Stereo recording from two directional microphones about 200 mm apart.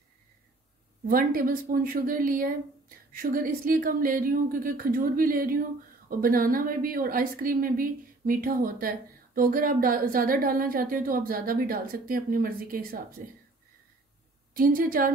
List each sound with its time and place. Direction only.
1.0 s speech: 45° right (ahead or behind)
14.5 s speech: 45° right (ahead or behind)